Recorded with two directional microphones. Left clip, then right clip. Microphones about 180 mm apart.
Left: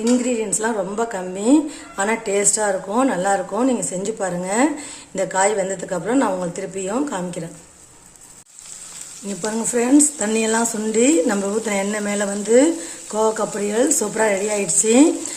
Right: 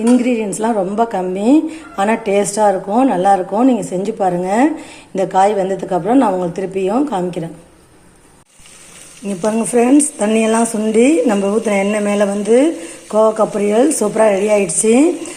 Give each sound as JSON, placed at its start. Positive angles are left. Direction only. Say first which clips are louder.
{"t": 0.2, "sound": "a woman's voice", "louder": "right 4 dB", "side_deg": -10}
{"t": 1.4, "sound": "a woman's voice", "louder": "right 3 dB", "side_deg": 30}
{"t": 2.0, "sound": "a woman's voice", "louder": "right 6 dB", "side_deg": -5}
{"t": 9.4, "sound": "a woman's voice", "louder": "right 7 dB", "side_deg": 15}